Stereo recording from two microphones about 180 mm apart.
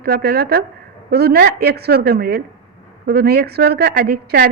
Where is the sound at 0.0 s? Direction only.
60° right (ahead or behind).